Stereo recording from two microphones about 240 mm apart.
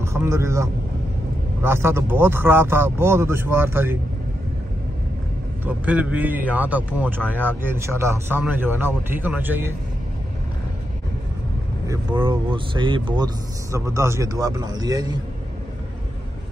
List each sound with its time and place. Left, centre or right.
0.0 s speech: centre
5.9 s speech: centre
11.9 s speech: centre